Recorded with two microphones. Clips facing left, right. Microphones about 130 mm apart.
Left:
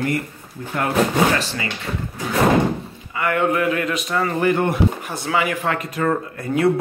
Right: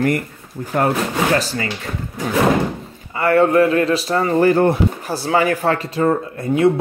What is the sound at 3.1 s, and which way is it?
Speech, 35° right (ahead or behind).